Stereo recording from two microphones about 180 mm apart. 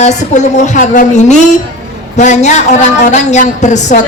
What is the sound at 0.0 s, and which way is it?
A woman's voice, 40° left (ahead or behind).